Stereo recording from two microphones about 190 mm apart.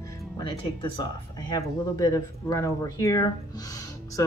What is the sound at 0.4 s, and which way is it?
Speech, 25° left (ahead or behind).